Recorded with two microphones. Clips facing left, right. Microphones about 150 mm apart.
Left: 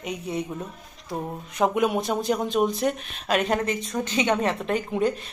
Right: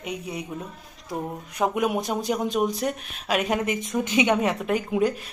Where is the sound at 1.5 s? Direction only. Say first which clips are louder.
Left 2 dB; centre (ahead or behind).